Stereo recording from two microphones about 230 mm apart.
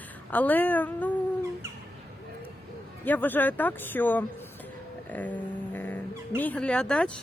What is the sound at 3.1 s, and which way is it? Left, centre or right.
Speech, centre.